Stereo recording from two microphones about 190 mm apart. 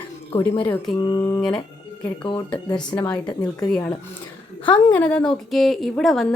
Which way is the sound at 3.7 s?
10° left (ahead or behind).